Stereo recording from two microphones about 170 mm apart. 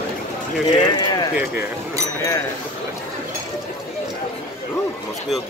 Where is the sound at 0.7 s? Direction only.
25° left (ahead or behind).